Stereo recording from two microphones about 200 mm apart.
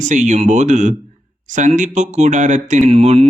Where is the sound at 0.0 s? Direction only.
35° right (ahead or behind).